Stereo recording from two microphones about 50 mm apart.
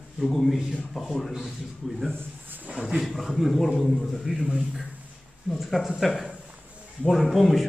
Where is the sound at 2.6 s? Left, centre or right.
Right.